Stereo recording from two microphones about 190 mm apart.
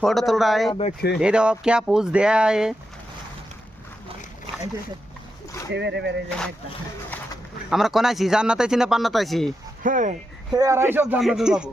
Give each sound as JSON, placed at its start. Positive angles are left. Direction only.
{"t": 0.0, "sound": "speech", "side_deg": 0}
{"t": 0.7, "sound": "speech", "side_deg": 35}
{"t": 1.2, "sound": "speech", "side_deg": -5}
{"t": 5.7, "sound": "speech", "side_deg": -65}
{"t": 7.7, "sound": "speech", "side_deg": 0}
{"t": 9.8, "sound": "speech", "side_deg": -40}
{"t": 10.5, "sound": "speech", "side_deg": -15}
{"t": 11.1, "sound": "speech", "side_deg": 0}